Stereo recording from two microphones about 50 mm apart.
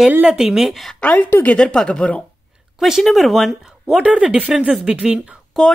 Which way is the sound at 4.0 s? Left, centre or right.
Right.